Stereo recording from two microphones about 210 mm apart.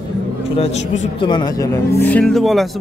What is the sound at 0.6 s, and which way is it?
Speech, 30° left (ahead or behind).